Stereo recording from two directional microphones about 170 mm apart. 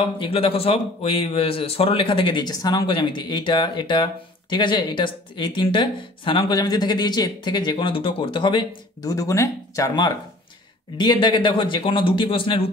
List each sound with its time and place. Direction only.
0.0 s speech: 35° left (ahead or behind)